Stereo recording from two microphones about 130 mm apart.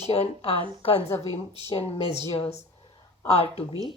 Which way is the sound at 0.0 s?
55° left (ahead or behind).